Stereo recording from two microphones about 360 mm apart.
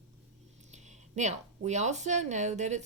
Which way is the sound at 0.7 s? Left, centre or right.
Centre.